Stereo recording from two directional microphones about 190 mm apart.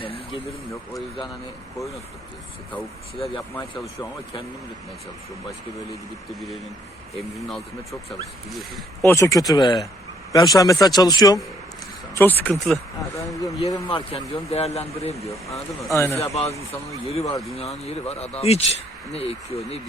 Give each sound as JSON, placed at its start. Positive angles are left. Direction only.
{"t": 0.0, "sound": "a sound", "side_deg": 30}
{"t": 7.2, "sound": "speech", "side_deg": 0}
{"t": 9.0, "sound": "speech", "side_deg": 15}
{"t": 12.1, "sound": "speech", "side_deg": 10}
{"t": 13.0, "sound": "speech", "side_deg": 15}
{"t": 15.1, "sound": "speech", "side_deg": 15}
{"t": 15.4, "sound": "speech", "side_deg": 0}
{"t": 15.9, "sound": "speech", "side_deg": 15}
{"t": 16.1, "sound": "speech", "side_deg": 35}